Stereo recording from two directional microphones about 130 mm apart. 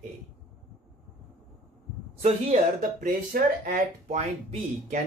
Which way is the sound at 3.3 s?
90° right.